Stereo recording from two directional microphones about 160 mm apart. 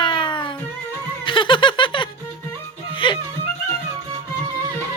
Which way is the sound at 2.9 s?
30° left (ahead or behind).